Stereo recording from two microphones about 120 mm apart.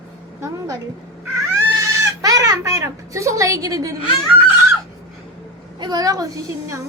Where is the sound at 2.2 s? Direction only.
30° right (ahead or behind).